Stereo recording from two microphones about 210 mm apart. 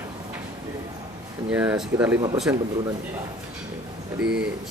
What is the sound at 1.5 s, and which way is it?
Speech, 5° right (ahead or behind).